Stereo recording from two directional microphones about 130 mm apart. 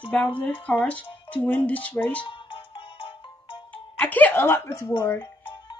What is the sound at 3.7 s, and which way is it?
Speech, 15° left (ahead or behind).